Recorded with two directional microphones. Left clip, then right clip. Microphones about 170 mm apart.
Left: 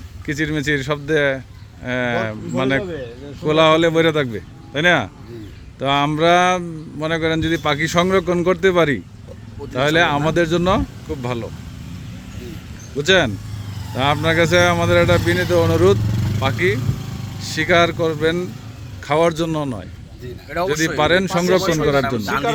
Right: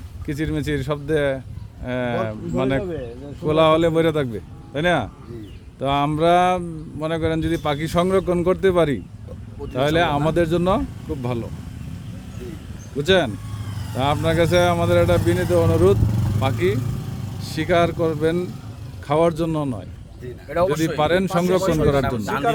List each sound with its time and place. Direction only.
0.3 s a man's voice: centre (ahead or behind)
13.0 s a man's voice: centre (ahead or behind)
21.0 s a man's voice: centre (ahead or behind)
22.2 s speech: 60° right (ahead or behind)